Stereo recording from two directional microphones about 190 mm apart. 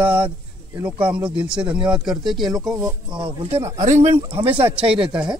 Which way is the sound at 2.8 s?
25° right (ahead or behind).